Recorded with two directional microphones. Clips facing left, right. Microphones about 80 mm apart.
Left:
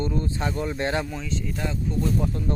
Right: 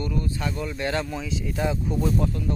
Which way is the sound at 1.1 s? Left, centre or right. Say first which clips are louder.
Right 1 dB; centre.